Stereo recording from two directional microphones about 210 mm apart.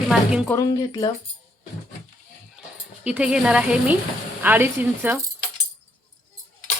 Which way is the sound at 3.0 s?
5° right (ahead or behind).